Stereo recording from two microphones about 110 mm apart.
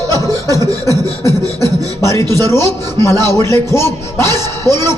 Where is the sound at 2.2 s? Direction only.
35° right (ahead or behind).